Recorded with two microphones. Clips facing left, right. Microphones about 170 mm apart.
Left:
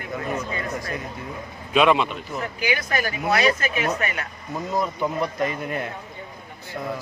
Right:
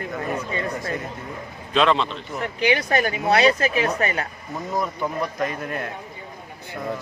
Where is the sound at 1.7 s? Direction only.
10° left (ahead or behind).